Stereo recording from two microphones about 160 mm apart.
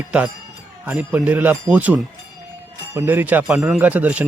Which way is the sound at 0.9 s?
10° right (ahead or behind).